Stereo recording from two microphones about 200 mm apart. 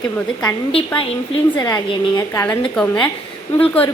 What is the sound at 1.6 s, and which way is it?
A woman's voice, 20° left (ahead or behind).